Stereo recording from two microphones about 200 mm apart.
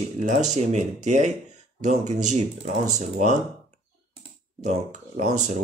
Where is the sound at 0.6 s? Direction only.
35° right (ahead or behind).